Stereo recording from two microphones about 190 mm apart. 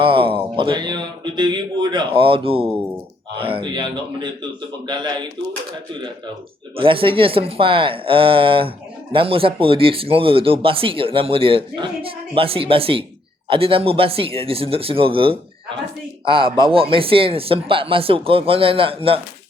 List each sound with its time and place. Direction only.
0.0 s speech: 30° right (ahead or behind)
6.7 s speech: 30° right (ahead or behind)